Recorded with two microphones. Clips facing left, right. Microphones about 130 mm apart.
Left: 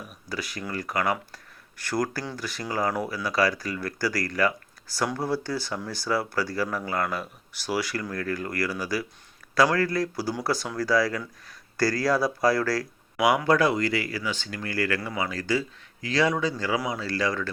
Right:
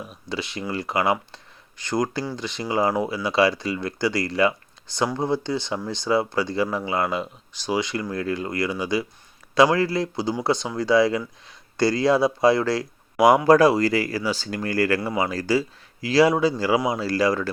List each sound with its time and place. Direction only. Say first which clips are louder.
0.0 s speech: right 4 dB; 30° right (ahead or behind)
13.1 s speech: right 6 dB; 40° right (ahead or behind)